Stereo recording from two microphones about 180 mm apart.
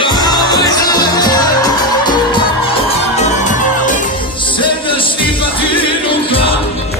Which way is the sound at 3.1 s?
40° left (ahead or behind).